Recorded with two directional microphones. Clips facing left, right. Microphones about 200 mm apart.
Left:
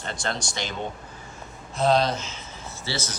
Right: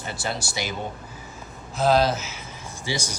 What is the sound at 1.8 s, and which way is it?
A man's voice, 5° right (ahead or behind).